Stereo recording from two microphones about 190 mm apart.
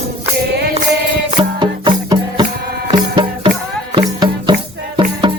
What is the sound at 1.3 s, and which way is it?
Music, 25° right (ahead or behind).